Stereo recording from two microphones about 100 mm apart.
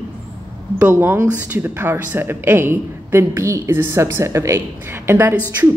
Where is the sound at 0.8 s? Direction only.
20° right (ahead or behind).